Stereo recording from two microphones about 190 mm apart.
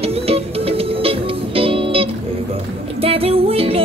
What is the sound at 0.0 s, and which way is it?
Music, 30° right (ahead or behind).